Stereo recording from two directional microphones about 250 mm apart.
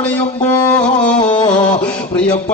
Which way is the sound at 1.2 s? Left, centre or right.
Centre.